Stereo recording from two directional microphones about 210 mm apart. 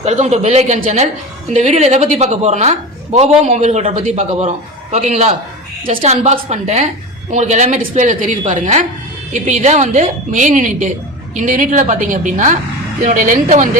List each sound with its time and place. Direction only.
0.0 s a woman's voice: 30° right (ahead or behind)